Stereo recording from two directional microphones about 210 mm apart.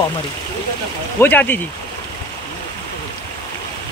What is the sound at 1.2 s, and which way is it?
Speech, 10° left (ahead or behind).